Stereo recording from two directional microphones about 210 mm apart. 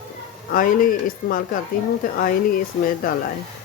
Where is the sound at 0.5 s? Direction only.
40° left (ahead or behind).